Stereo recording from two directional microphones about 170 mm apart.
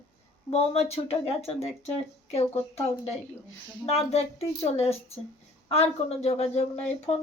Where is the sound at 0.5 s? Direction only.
40° left (ahead or behind).